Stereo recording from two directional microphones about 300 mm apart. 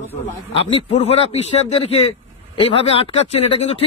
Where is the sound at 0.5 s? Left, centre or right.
Centre.